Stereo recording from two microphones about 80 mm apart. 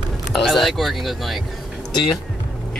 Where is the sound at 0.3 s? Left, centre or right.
Centre.